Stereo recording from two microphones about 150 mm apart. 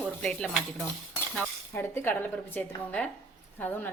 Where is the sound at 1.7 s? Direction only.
15° left (ahead or behind).